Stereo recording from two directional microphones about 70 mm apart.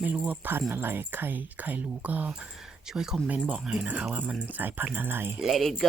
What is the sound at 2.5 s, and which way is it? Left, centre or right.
Speech, centre.